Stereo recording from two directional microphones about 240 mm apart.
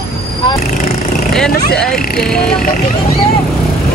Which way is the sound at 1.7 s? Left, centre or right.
Centre.